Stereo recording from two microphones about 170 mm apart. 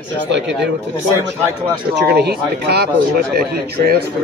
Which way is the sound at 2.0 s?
70° right (ahead or behind).